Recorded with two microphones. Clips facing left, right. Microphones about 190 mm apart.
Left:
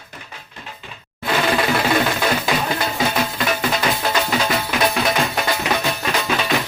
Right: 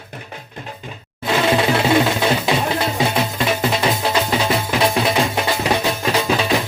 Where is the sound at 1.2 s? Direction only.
25° right (ahead or behind).